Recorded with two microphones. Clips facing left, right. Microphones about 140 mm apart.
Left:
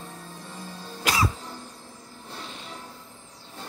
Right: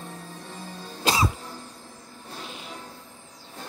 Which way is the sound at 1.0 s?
25° right (ahead or behind).